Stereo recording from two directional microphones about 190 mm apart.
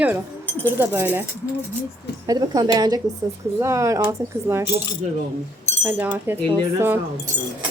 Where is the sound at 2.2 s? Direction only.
20° right (ahead or behind).